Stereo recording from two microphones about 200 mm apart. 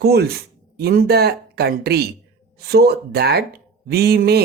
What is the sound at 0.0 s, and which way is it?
Speech, 55° right (ahead or behind).